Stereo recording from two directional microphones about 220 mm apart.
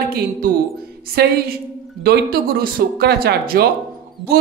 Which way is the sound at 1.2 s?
45° right (ahead or behind).